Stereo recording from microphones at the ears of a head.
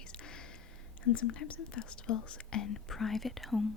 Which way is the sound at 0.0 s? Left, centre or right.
Left.